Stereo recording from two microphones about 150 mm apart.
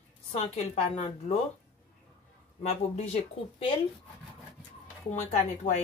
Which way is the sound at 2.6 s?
45° left (ahead or behind).